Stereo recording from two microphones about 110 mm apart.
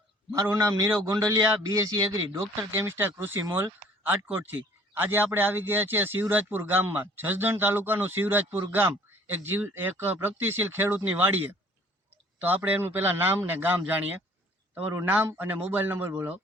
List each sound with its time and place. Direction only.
0.3 s a man's voice: 25° right (ahead or behind)